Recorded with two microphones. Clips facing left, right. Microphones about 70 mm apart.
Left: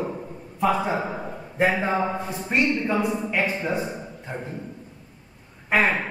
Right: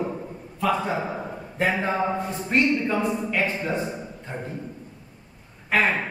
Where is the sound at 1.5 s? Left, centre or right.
Centre.